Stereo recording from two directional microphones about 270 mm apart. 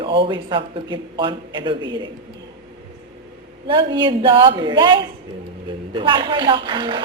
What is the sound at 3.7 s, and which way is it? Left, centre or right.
Speech, centre.